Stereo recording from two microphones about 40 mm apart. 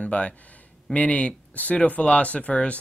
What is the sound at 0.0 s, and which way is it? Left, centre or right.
Speech, left.